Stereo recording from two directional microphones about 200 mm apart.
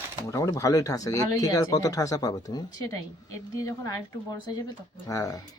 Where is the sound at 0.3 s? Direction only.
15° left (ahead or behind).